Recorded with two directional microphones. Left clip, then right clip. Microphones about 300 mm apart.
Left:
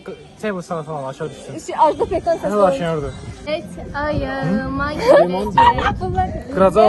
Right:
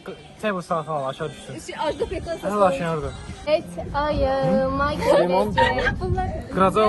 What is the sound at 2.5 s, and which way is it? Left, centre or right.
Speech, centre.